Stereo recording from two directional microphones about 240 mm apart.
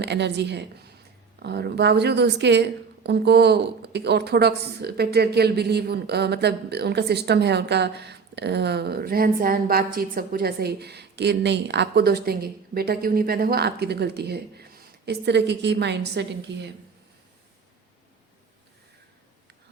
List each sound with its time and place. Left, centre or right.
0.0 s a woman's voice: right